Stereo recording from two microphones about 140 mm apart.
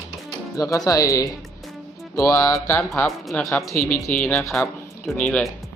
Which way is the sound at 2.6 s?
10° left (ahead or behind).